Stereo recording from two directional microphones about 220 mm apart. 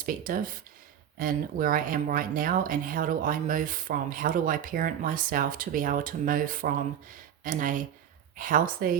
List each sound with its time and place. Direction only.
0.0 s speech: 40° right (ahead or behind)